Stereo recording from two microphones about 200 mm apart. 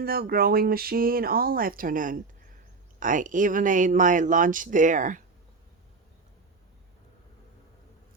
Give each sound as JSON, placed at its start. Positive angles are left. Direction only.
{"t": 0.0, "sound": "speech", "side_deg": -50}